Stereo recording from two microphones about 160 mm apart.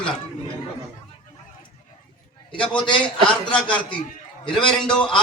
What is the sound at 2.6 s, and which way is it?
A man's voice, 30° left (ahead or behind).